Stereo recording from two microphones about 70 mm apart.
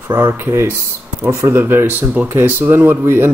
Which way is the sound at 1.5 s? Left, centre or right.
Right.